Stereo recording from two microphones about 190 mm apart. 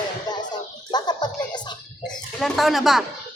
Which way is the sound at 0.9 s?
20° left (ahead or behind).